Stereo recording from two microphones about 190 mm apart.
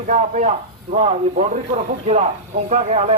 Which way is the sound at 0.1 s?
40° right (ahead or behind).